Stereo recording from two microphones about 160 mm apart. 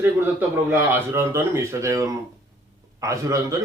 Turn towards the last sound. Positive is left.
turn(degrees=-20)  # may be behind; listen again after turning